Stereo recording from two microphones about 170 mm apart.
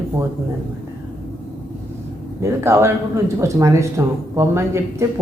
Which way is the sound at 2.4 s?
15° right (ahead or behind).